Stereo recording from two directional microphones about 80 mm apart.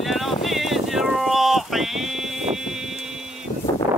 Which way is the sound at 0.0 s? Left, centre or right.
Centre.